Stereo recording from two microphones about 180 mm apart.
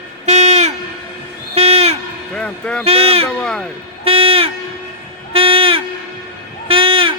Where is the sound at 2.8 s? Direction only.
35° right (ahead or behind).